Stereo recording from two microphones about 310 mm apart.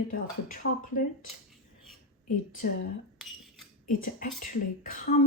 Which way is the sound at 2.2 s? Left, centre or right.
Left.